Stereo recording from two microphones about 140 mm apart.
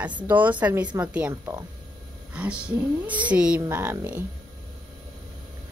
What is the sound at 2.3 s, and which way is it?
A woman's voice, 10° right (ahead or behind).